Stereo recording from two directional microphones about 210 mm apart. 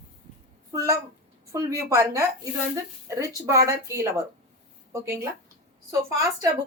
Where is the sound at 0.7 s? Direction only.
15° right (ahead or behind).